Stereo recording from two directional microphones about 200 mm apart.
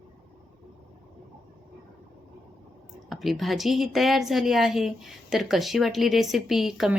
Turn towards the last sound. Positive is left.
turn(degrees=0)  # may be behind; listen again after turning